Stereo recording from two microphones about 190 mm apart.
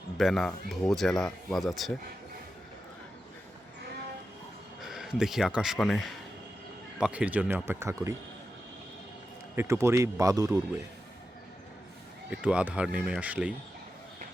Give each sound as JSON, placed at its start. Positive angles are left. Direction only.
{"t": 0.2, "sound": "speech", "side_deg": 0}
{"t": 4.8, "sound": "speech", "side_deg": 0}
{"t": 7.0, "sound": "speech", "side_deg": -5}
{"t": 9.6, "sound": "speech", "side_deg": -15}
{"t": 12.3, "sound": "speech", "side_deg": -5}